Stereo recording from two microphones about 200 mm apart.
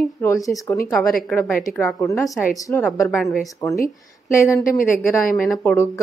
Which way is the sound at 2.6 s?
10° left (ahead or behind).